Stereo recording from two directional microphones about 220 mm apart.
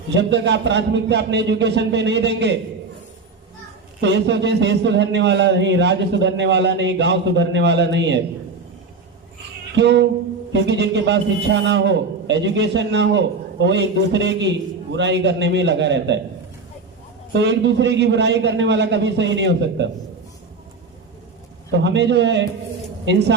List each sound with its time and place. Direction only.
0.1 s a man's voice: 55° right (ahead or behind)
4.0 s a man's voice: 50° right (ahead or behind)
9.7 s a man's voice: 50° right (ahead or behind)
17.3 s a man's voice: 55° right (ahead or behind)
21.7 s a man's voice: 55° right (ahead or behind)